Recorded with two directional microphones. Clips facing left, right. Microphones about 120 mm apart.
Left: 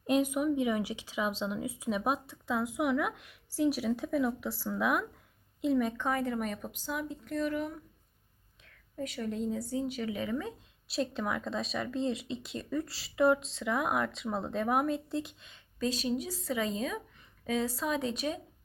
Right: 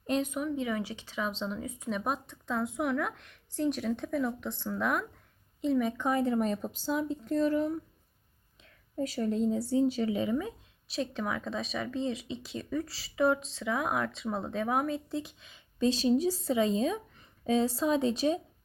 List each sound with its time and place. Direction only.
0.0 s speech: 10° left (ahead or behind)
6.0 s a woman's voice: 20° right (ahead or behind)
10.8 s speech: centre (ahead or behind)
15.8 s speech: 30° right (ahead or behind)